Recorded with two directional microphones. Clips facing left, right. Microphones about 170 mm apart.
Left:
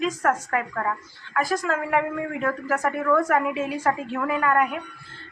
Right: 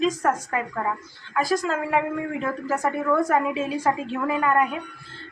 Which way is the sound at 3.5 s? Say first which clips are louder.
Right 1 dB; 25° right (ahead or behind).